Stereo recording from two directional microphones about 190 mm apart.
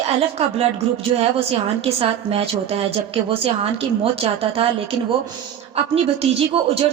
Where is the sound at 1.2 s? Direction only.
30° right (ahead or behind).